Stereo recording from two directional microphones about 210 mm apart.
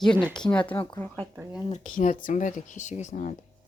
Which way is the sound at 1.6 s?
35° left (ahead or behind).